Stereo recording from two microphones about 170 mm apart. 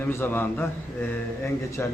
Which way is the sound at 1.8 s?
15° left (ahead or behind).